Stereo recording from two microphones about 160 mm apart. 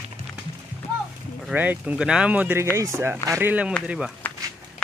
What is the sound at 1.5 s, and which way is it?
Speech, 10° right (ahead or behind).